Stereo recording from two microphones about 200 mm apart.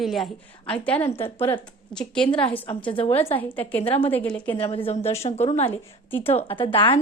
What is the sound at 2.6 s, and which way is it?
Speech, 25° left (ahead or behind).